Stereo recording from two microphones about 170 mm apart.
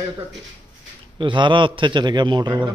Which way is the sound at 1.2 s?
30° right (ahead or behind).